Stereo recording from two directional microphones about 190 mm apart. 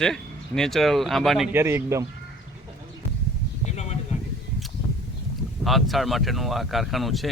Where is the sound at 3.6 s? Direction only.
35° left (ahead or behind).